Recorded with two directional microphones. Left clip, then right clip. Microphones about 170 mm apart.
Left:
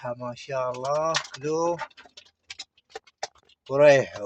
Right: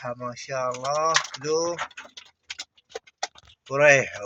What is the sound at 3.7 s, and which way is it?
Speech, 15° left (ahead or behind).